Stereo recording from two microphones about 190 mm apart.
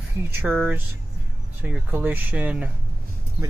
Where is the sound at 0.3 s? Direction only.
10° right (ahead or behind).